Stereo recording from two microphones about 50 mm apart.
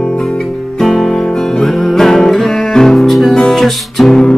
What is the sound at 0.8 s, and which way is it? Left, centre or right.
Music, centre.